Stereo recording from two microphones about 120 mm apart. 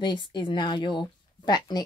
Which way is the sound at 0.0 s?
40° left (ahead or behind).